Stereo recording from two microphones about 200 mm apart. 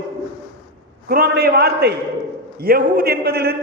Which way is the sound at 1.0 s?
50° right (ahead or behind).